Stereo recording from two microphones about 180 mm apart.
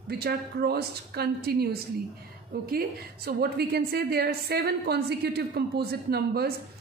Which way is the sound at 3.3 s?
60° right (ahead or behind).